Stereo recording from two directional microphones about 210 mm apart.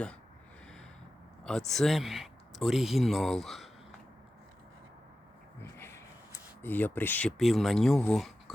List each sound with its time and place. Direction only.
1.5 s speech: centre (ahead or behind)
5.5 s a sound: 10° left (ahead or behind)
6.6 s speech: 10° left (ahead or behind)